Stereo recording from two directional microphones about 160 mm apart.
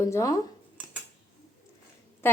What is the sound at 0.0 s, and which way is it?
Speech, 20° left (ahead or behind).